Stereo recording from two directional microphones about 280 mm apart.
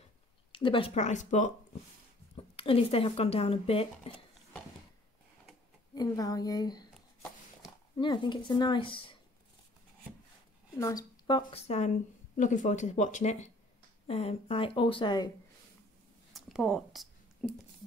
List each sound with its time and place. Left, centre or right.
0.5 s speech: centre
5.9 s a woman's voice: centre
8.0 s a woman's voice: centre
10.8 s a woman's voice: centre
16.3 s a sound: centre